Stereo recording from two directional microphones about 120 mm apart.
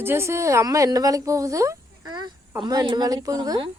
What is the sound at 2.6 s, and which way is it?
A woman's voice, 35° right (ahead or behind).